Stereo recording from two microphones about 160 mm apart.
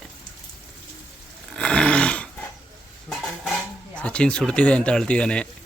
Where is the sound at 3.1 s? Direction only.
Centre (ahead or behind).